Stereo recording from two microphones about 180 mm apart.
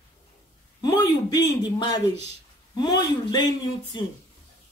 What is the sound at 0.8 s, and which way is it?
Speech, 20° left (ahead or behind).